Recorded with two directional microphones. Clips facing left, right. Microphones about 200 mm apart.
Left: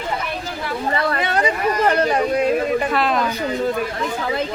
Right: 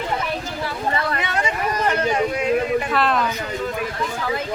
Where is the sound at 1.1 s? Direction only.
35° left (ahead or behind).